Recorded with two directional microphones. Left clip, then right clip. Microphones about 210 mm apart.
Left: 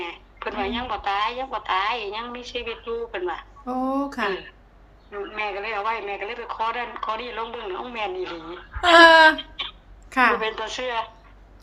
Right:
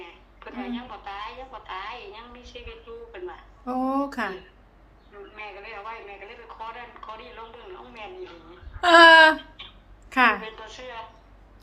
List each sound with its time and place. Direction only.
0.0 s a man's voice: 50° left (ahead or behind)
3.7 s speech: 5° right (ahead or behind)
5.1 s a man's voice: 50° left (ahead or behind)
8.8 s speech: centre (ahead or behind)
9.4 s a sound: 50° left (ahead or behind)
10.1 s a woman's voice: 5° right (ahead or behind)
10.4 s a man's voice: 50° left (ahead or behind)